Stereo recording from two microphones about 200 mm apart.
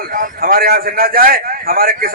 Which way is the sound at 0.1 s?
45° right (ahead or behind).